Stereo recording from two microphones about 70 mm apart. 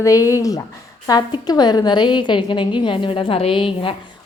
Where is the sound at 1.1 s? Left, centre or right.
Left.